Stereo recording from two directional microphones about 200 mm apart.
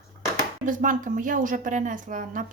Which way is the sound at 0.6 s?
40° right (ahead or behind).